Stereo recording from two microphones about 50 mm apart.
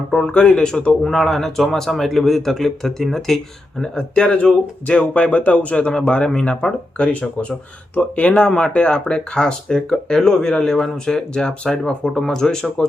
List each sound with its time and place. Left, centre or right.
0.1 s speech: centre